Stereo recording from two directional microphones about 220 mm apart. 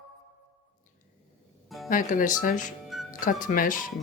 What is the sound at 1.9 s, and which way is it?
Speech, 40° left (ahead or behind).